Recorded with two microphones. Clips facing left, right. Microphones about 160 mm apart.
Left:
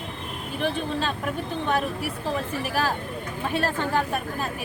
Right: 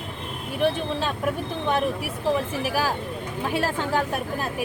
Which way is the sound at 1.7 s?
15° right (ahead or behind).